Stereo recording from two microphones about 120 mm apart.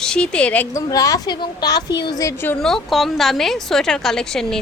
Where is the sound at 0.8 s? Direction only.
30° left (ahead or behind).